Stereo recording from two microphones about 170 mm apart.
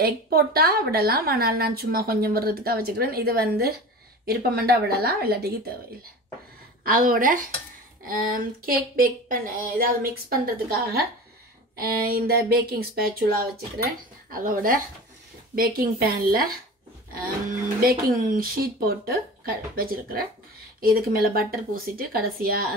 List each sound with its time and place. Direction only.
0.0 s a woman's voice: 65° right (ahead or behind)
6.8 s a woman's voice: 55° right (ahead or behind)
14.3 s a woman's voice: 55° right (ahead or behind)